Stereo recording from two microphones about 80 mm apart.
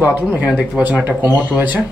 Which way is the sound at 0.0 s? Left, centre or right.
Right.